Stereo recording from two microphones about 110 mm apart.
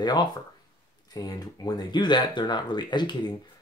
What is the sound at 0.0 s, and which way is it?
Speech, 40° left (ahead or behind).